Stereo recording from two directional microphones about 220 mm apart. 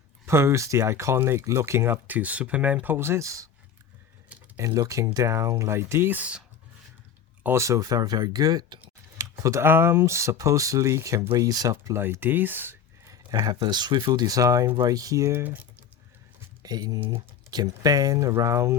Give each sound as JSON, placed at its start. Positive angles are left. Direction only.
{"t": 0.3, "sound": "speech", "side_deg": -10}
{"t": 7.4, "sound": "speech", "side_deg": -10}
{"t": 16.6, "sound": "speech", "side_deg": -15}